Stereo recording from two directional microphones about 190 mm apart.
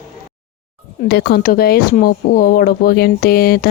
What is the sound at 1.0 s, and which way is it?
Speech, 60° left (ahead or behind).